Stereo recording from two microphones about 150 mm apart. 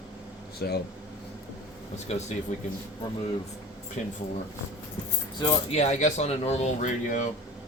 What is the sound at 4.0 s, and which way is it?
Speech, 50° left (ahead or behind).